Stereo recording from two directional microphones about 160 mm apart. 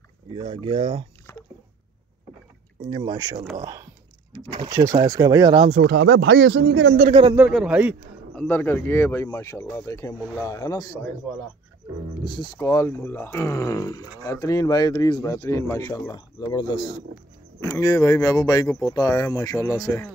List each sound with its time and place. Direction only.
0.3 s speech: 35° right (ahead or behind)
1.3 s a sound: 20° left (ahead or behind)
2.9 s speech: 30° right (ahead or behind)
4.3 s a sound: 25° right (ahead or behind)
4.6 s speech: 20° right (ahead or behind)
5.8 s speech: 90° right
7.3 s a man's voice: 10° right (ahead or behind)
8.4 s speech: 10° left (ahead or behind)
12.3 s speech: 20° left (ahead or behind)